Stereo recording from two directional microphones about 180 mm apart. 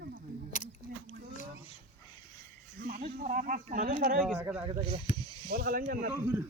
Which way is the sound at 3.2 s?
50° right (ahead or behind).